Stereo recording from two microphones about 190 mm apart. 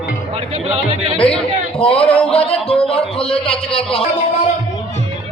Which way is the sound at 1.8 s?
30° left (ahead or behind).